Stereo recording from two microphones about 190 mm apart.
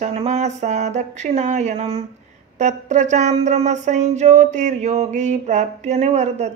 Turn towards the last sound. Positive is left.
turn(degrees=-35)  # may be behind; listen again after turning